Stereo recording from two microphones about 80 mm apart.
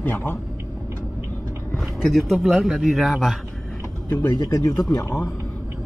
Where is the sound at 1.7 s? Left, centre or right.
Centre.